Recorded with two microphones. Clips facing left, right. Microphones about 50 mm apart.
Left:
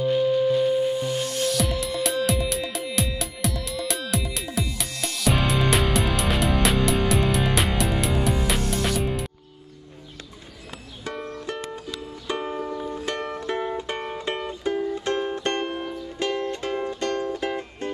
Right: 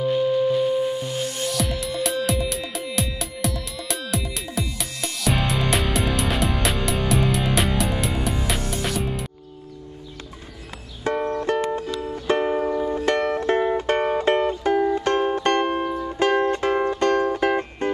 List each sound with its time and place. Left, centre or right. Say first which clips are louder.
1.4 s music: left 2 dB; centre
11.1 s music: right 9 dB; right
14.8 s music: right 6 dB; right
15.0 s music: right 5 dB; right